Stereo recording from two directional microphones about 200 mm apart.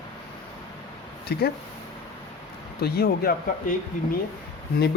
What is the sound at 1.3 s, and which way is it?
Speech, 55° left (ahead or behind).